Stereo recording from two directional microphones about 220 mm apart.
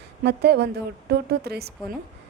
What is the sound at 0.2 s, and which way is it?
A woman's voice, 45° right (ahead or behind).